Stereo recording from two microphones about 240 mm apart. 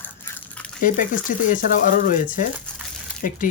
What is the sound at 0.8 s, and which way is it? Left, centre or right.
Speech, left.